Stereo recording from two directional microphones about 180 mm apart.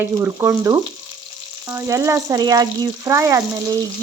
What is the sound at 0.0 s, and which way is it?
Speech, 15° right (ahead or behind).